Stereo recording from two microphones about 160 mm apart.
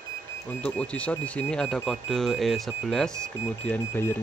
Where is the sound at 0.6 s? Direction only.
10° left (ahead or behind).